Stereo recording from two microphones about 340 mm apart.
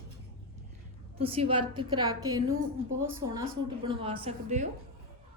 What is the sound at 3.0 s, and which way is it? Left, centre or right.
Speech, right.